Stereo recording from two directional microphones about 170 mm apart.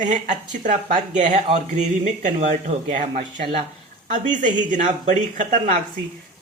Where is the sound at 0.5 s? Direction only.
50° right (ahead or behind).